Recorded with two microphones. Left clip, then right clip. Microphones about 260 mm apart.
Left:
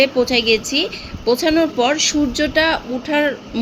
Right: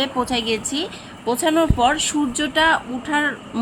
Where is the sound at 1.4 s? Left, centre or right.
Right.